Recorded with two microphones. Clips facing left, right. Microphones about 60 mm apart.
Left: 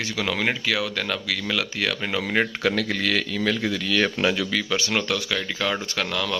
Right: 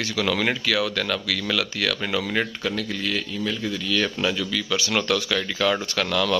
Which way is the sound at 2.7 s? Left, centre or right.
Left.